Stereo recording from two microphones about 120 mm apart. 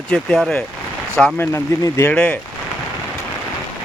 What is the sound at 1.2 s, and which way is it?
Speech, 20° left (ahead or behind).